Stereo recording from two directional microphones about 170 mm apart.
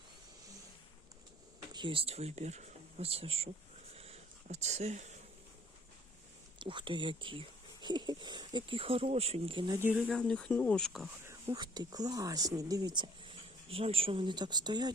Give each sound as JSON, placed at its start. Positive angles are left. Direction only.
{"t": 1.7, "sound": "speech", "side_deg": -30}
{"t": 3.9, "sound": "a sound", "side_deg": -35}
{"t": 6.6, "sound": "speech", "side_deg": -30}
{"t": 9.7, "sound": "speech", "side_deg": -15}
{"t": 10.1, "sound": "speech", "side_deg": 5}
{"t": 11.3, "sound": "speech", "side_deg": -20}